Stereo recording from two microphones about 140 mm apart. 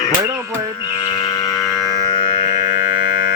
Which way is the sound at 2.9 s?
90° left.